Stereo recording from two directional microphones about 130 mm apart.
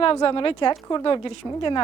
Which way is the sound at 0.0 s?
45° left (ahead or behind).